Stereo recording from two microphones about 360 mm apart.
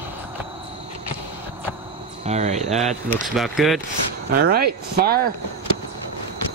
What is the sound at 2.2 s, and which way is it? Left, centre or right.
Speech, centre.